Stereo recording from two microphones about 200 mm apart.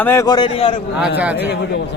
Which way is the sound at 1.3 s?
55° left (ahead or behind).